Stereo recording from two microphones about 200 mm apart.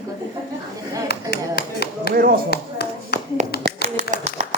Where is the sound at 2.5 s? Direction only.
55° left (ahead or behind).